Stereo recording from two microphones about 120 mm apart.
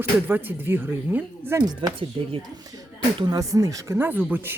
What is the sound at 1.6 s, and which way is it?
Speech, 35° right (ahead or behind).